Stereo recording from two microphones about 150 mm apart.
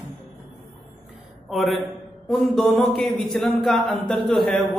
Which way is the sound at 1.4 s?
Centre (ahead or behind).